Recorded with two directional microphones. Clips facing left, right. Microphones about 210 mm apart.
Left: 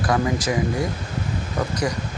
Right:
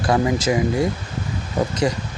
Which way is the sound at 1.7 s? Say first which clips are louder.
Right 3 dB; 25° right (ahead or behind).